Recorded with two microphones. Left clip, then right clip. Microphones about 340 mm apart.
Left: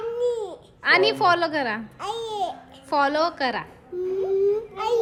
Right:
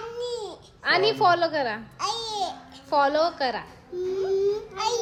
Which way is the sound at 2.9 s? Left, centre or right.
Centre.